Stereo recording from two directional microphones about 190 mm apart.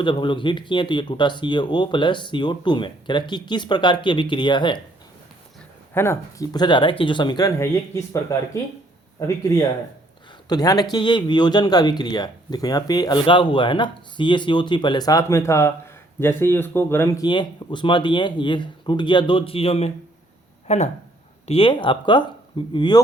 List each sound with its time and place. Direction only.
0.0 s speech: 25° left (ahead or behind)
5.9 s speech: 15° left (ahead or behind)
9.2 s speech: 15° left (ahead or behind)